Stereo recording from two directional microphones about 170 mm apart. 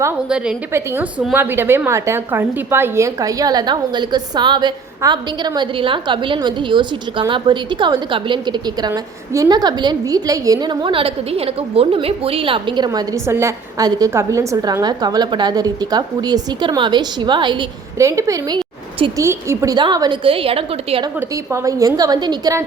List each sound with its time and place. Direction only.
0.3 s a woman's voice: 5° right (ahead or behind); by 19.1 s 30° right (ahead or behind)
19.1 s a woman's voice: 15° right (ahead or behind); by 21.1 s 35° right (ahead or behind)
21.2 s a woman's voice: 20° right (ahead or behind)